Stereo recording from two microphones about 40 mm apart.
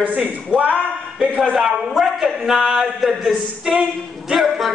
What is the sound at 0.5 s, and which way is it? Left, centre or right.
Speech, right.